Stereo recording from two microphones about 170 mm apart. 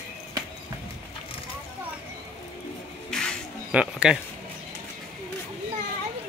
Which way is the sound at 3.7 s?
5° right (ahead or behind).